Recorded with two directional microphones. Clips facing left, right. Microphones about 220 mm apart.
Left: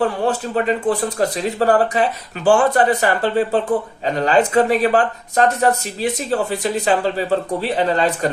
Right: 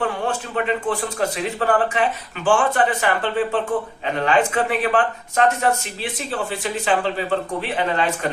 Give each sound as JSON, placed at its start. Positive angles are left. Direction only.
{"t": 0.0, "sound": "speech", "side_deg": 35}